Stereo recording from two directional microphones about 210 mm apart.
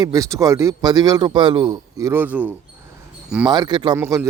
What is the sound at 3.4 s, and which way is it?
Speech, 20° right (ahead or behind).